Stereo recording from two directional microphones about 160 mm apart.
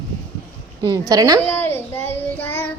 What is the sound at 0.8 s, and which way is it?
Speech, 25° right (ahead or behind).